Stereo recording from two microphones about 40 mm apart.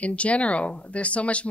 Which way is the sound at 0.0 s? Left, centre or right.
Left.